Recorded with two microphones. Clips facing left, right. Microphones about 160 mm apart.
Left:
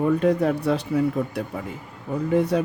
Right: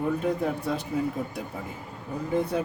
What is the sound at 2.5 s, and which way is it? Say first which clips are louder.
Speech: left 5 dB; 75° left (ahead or behind).